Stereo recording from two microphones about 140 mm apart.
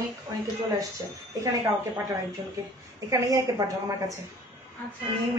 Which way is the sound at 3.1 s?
25° right (ahead or behind).